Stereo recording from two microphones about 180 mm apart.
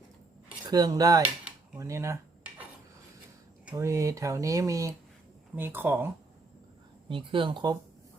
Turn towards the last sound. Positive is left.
turn(degrees=-25)  # may be behind; listen again after turning